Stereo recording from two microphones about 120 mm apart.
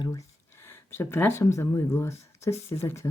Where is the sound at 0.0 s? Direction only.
30° left (ahead or behind).